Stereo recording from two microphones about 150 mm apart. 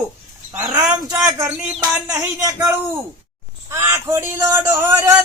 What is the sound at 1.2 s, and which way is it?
Speech, 20° right (ahead or behind).